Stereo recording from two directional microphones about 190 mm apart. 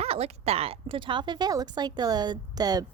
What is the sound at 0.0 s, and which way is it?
A woman's voice, 30° right (ahead or behind).